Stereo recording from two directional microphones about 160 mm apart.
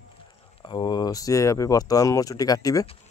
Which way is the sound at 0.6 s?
30° left (ahead or behind).